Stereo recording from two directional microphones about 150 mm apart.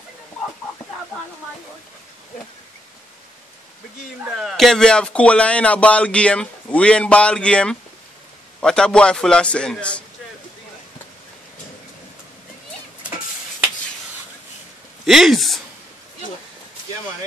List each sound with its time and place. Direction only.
4.2 s speech: centre (ahead or behind)
15.0 s speech: centre (ahead or behind)